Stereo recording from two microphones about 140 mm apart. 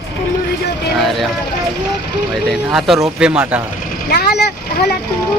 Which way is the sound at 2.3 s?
Centre (ahead or behind).